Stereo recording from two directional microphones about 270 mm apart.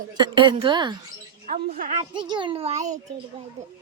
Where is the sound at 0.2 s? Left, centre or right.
Centre.